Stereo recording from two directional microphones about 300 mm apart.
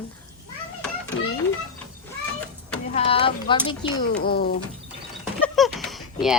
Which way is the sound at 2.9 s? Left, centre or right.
Centre.